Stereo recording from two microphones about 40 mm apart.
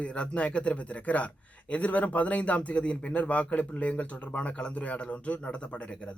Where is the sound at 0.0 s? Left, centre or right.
Left.